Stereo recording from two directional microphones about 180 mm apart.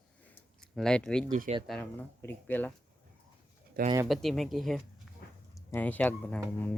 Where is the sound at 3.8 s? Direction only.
60° right (ahead or behind).